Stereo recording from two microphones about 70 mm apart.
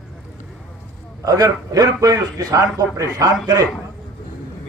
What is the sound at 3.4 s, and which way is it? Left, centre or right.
Speech, right.